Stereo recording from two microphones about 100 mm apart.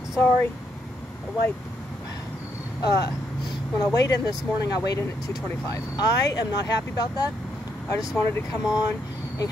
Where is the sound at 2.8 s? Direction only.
40° left (ahead or behind).